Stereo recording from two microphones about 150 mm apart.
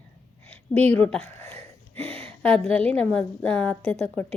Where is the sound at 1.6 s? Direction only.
40° right (ahead or behind).